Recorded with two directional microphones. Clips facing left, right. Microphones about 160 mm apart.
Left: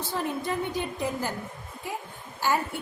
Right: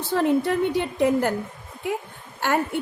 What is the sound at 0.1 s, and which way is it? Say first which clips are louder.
A woman's voice: right 10 dB; 65° right (ahead or behind).